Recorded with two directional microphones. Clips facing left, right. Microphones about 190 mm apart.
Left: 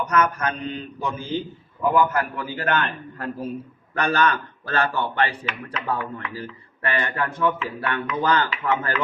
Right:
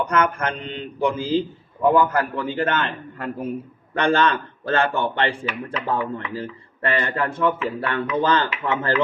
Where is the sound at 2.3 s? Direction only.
25° right (ahead or behind).